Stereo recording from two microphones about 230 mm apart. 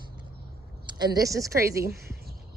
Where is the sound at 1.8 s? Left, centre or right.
Right.